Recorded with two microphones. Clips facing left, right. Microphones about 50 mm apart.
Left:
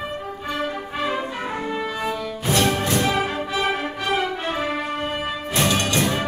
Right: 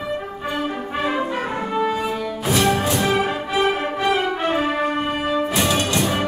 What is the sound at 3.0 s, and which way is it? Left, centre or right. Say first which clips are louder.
Music: right 2 dB; right.